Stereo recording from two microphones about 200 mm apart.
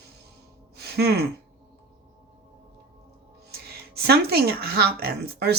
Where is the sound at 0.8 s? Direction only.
55° right (ahead or behind).